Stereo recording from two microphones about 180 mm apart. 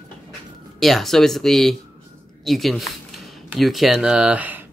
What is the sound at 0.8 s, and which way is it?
Speech, centre (ahead or behind).